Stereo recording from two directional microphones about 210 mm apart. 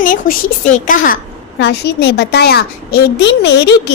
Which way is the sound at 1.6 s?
50° left (ahead or behind).